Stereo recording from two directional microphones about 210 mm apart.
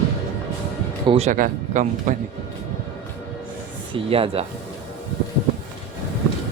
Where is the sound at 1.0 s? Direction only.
30° right (ahead or behind).